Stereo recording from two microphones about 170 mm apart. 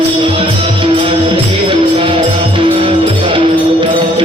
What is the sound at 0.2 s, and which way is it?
Music, 30° right (ahead or behind).